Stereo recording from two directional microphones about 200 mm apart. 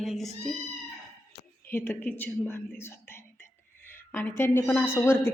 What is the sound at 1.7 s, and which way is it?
A woman's voice, 10° left (ahead or behind).